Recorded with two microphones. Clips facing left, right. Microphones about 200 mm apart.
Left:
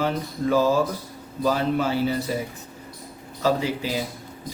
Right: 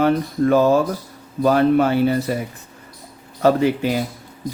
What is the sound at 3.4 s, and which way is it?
Speech, 60° right (ahead or behind).